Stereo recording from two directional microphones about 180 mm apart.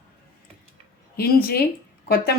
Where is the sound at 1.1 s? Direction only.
55° left (ahead or behind).